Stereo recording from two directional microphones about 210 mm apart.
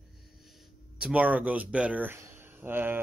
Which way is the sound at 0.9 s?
5° right (ahead or behind).